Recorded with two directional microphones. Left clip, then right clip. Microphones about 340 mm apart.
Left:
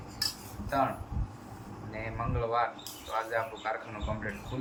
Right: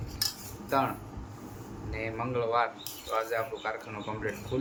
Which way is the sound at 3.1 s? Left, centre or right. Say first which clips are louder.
Right 1 dB; centre.